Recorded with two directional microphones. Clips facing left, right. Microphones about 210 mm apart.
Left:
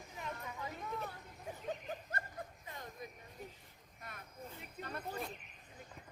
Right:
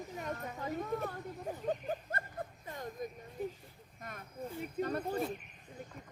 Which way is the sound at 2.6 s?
50° right (ahead or behind).